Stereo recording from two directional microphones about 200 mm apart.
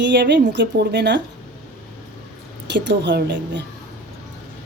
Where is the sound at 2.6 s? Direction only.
60° right (ahead or behind).